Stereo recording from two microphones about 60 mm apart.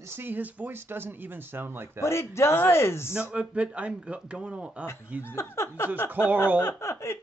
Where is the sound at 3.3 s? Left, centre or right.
Right.